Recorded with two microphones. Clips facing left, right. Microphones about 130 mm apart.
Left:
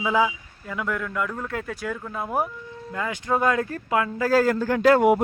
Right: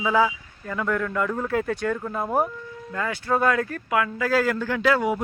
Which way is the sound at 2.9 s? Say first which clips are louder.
Right 1 dB; 15° left (ahead or behind).